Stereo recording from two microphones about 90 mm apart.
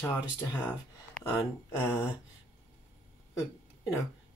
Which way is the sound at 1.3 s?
45° left (ahead or behind).